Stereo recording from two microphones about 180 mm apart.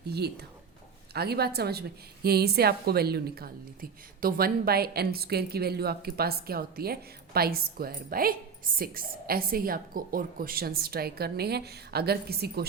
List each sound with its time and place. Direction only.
0.1 s a woman's voice: 65° right (ahead or behind)